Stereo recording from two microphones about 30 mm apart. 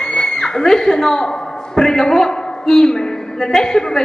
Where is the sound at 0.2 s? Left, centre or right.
Left.